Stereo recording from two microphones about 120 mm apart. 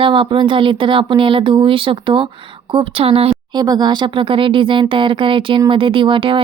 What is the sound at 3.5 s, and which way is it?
Speech, 35° right (ahead or behind).